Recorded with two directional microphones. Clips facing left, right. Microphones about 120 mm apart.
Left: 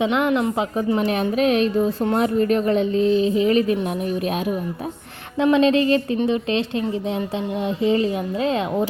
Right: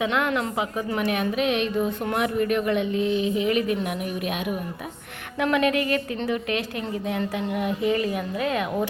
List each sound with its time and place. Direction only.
0.0 s a woman's voice: 20° left (ahead or behind)